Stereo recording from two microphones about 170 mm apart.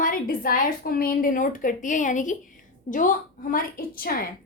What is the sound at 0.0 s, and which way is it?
A woman's voice, 55° left (ahead or behind).